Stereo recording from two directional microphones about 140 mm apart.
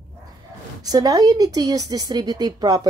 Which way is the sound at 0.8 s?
25° right (ahead or behind).